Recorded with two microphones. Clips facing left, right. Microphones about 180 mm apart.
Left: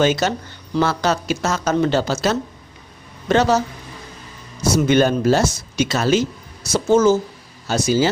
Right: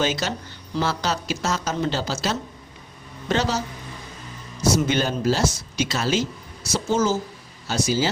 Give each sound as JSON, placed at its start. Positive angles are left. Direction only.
{"t": 0.0, "sound": "speech", "side_deg": 55}
{"t": 4.9, "sound": "speech", "side_deg": 55}